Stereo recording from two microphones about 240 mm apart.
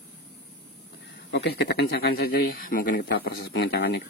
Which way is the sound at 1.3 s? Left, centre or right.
Left.